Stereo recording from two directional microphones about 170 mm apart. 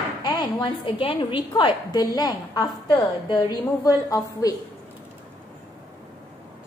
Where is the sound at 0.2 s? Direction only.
25° left (ahead or behind).